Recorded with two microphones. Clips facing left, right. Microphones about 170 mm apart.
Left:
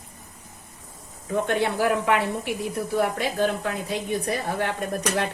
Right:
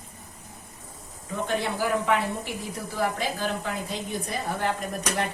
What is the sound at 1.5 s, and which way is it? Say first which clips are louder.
A man's voice: left 3 dB; 65° left (ahead or behind).